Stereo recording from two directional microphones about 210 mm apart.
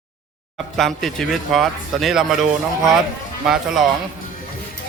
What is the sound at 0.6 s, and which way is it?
Speech, centre (ahead or behind).